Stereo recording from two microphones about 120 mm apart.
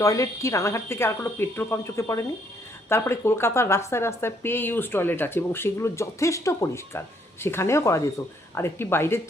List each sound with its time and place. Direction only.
0.0 s a woman's voice: 25° left (ahead or behind)